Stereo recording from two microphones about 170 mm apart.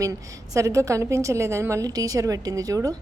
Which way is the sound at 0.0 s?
20° right (ahead or behind).